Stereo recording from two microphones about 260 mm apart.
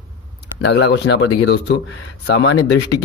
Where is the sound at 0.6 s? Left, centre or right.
Left.